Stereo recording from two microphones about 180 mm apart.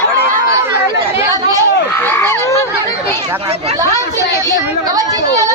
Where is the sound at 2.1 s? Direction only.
15° left (ahead or behind).